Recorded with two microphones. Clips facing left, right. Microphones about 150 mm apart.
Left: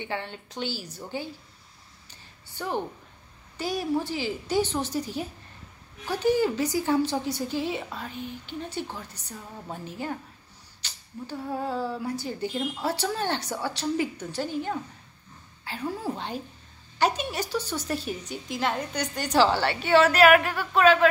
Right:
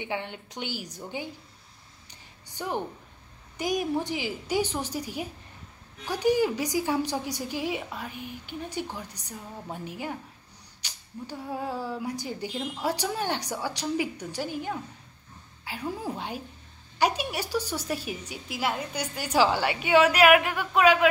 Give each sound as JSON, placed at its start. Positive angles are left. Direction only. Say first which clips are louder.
{"t": 0.0, "sound": "a woman's voice", "louder": "even", "side_deg": -15}
{"t": 2.0, "sound": "a sound", "louder": "right 1 dB", "side_deg": -15}
{"t": 3.5, "sound": "a woman's voice", "louder": "even", "side_deg": -15}